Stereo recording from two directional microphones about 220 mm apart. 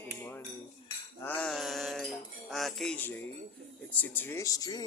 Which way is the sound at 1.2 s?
5° left (ahead or behind).